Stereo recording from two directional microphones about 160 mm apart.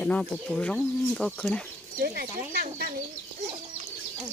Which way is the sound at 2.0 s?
70° right (ahead or behind).